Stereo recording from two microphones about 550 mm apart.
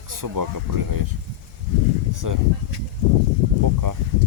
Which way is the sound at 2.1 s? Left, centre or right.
Right.